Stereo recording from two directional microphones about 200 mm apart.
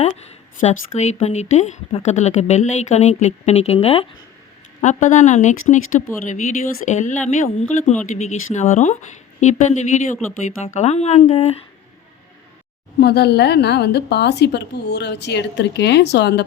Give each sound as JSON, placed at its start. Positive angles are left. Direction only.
{"t": 0.6, "sound": "speech", "side_deg": 35}
{"t": 13.0, "sound": "a woman's voice", "side_deg": 55}